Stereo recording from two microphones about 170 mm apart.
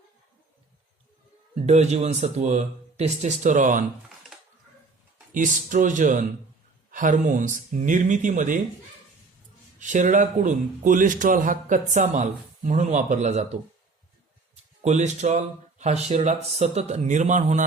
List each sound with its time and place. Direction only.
1.5 s speech: 40° right (ahead or behind)
5.3 s speech: 50° right (ahead or behind)
9.8 s speech: 45° right (ahead or behind)
14.5 s speech: 40° right (ahead or behind)